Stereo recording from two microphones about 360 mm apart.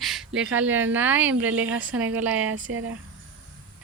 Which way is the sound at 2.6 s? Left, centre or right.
Right.